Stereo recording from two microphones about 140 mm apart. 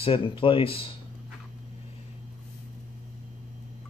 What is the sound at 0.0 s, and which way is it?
Speech, 40° left (ahead or behind).